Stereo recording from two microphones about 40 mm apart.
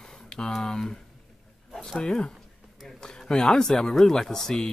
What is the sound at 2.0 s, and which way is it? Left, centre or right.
Speech, left.